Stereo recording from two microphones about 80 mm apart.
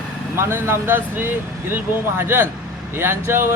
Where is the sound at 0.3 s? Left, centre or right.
Right.